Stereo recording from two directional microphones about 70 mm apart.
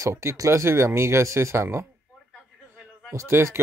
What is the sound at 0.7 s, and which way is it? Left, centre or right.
Speech, right.